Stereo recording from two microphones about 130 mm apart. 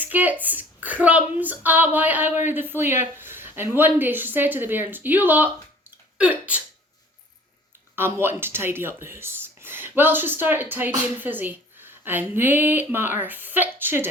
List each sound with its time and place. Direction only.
0.0 s speech: 15° right (ahead or behind)
6.1 s a sound: 10° right (ahead or behind)
7.9 s speech: 15° right (ahead or behind)